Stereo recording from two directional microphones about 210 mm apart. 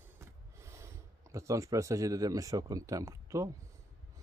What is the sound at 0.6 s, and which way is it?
Speech, 15° right (ahead or behind).